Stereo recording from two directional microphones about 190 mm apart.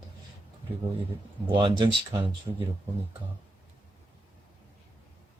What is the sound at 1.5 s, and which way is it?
Speech, 25° right (ahead or behind).